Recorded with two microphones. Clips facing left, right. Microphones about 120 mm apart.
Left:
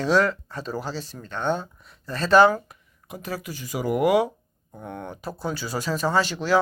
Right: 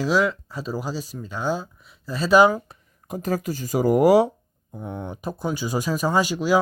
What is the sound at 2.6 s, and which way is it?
Speech, 40° right (ahead or behind).